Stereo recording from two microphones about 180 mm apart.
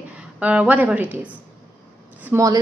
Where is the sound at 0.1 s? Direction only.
5° right (ahead or behind).